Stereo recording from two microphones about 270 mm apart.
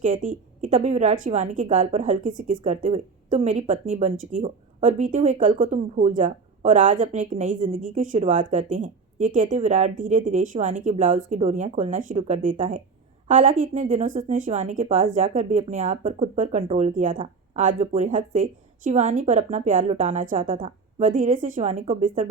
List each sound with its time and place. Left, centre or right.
0.0 s a woman's voice: right